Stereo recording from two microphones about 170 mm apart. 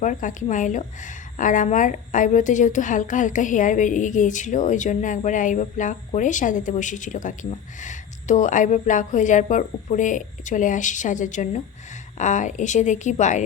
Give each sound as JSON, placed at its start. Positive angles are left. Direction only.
{"t": 0.0, "sound": "a woman's voice", "side_deg": 50}